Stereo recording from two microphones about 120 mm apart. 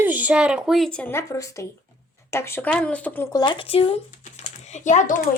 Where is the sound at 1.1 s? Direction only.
25° left (ahead or behind).